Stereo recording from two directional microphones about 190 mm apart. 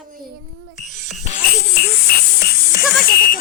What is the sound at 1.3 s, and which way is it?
Music, 35° left (ahead or behind).